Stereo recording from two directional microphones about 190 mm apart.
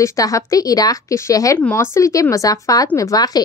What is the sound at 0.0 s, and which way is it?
A woman's voice, 15° left (ahead or behind).